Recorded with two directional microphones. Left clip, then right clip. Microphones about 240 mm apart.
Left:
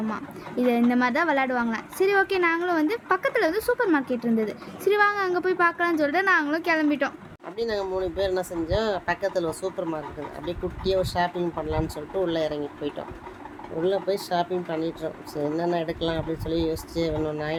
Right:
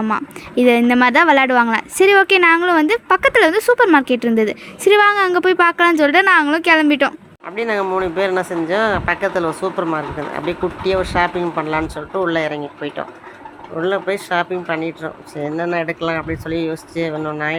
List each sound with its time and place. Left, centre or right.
0.1 s a woman's voice: right
7.5 s speech: centre
14.3 s speech: centre